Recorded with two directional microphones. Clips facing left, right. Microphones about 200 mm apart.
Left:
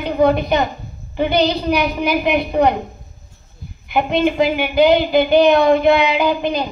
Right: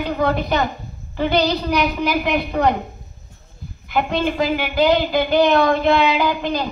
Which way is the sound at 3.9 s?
20° left (ahead or behind).